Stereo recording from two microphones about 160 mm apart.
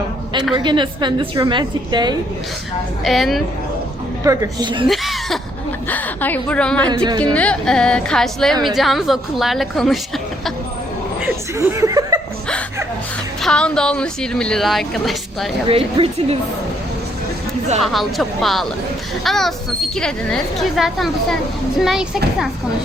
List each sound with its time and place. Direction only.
0.5 s speech: 30° right (ahead or behind)
3.0 s speech: centre (ahead or behind)
4.2 s speech: 20° right (ahead or behind)
4.9 s speech: centre (ahead or behind)
5.9 s a woman's voice: 10° left (ahead or behind)
6.9 s speech: 30° right (ahead or behind)
7.3 s speech: 5° left (ahead or behind)
11.2 s chuckle: 20° right (ahead or behind)
13.4 s speech: 5° left (ahead or behind)
15.7 s a woman's voice: 40° right (ahead or behind)
17.7 s speech: centre (ahead or behind)